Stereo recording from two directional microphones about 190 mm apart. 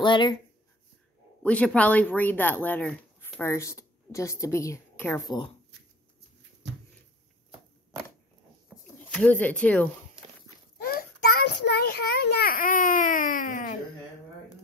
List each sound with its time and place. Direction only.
0.0 s speech: 25° left (ahead or behind)
1.4 s speech: 5° left (ahead or behind)
5.2 s speech: 20° left (ahead or behind)
8.6 s a sound: 5° left (ahead or behind)
10.8 s a child's voice: 50° left (ahead or behind)